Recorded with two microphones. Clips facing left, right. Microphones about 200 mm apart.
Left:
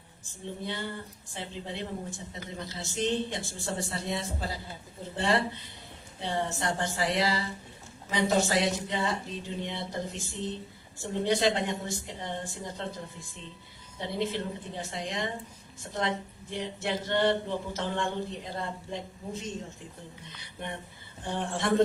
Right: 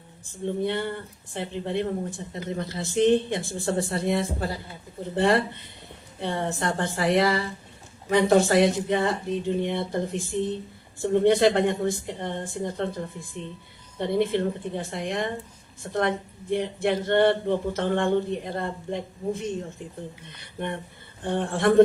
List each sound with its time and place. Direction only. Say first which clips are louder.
0.3 s speech: right 10 dB; 60° right (ahead or behind)
14.0 s speech: right 8 dB; 55° right (ahead or behind)